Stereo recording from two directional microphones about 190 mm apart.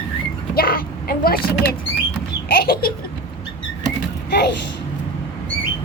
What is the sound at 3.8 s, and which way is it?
Creak, 60° left (ahead or behind).